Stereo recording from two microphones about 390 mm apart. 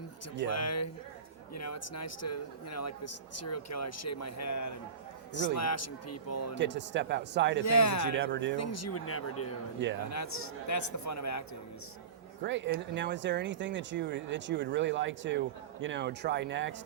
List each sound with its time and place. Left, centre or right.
0.4 s a man's voice: left
6.6 s speech: right
7.6 s speech: left
8.2 s speech: right
8.5 s a man's voice: left
12.4 s speech: right